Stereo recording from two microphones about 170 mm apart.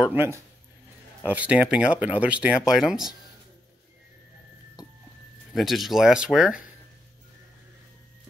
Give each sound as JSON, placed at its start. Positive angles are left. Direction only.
{"t": 0.1, "sound": "speech", "side_deg": -15}
{"t": 5.5, "sound": "speech", "side_deg": 0}